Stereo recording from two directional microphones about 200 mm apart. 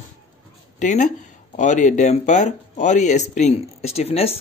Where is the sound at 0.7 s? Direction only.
40° left (ahead or behind).